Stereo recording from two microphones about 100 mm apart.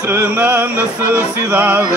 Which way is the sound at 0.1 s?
15° right (ahead or behind).